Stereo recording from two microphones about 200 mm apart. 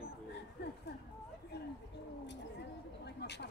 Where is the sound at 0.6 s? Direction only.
55° left (ahead or behind).